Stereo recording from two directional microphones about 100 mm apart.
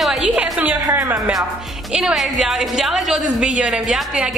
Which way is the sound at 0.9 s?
20° right (ahead or behind).